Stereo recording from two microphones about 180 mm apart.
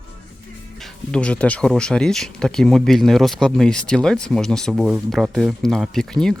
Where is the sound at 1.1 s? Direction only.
5° left (ahead or behind).